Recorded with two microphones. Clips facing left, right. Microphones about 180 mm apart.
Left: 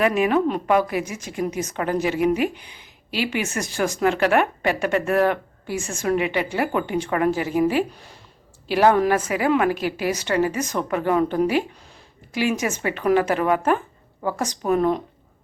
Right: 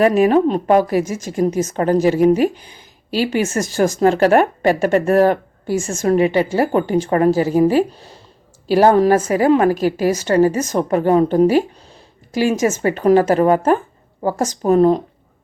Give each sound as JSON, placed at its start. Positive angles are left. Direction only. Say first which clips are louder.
{"t": 0.0, "sound": "a woman's voice", "louder": "right 6 dB", "side_deg": -40}